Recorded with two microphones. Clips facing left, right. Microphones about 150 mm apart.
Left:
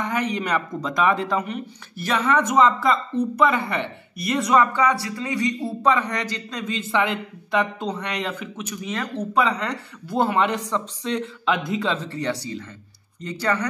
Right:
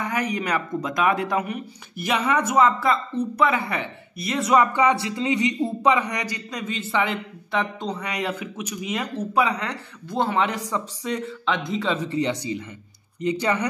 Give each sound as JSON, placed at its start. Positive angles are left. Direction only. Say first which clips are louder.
{"t": 0.0, "sound": "speech", "louder": "left 1 dB", "side_deg": -5}
{"t": 4.6, "sound": "speech", "louder": "right 1 dB", "side_deg": -20}
{"t": 11.4, "sound": "speech", "louder": "left 1 dB", "side_deg": 5}
{"t": 12.0, "sound": "speech", "louder": "right 3 dB", "side_deg": -15}